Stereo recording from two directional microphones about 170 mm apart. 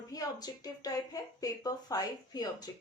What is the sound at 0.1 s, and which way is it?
Speech, 20° left (ahead or behind).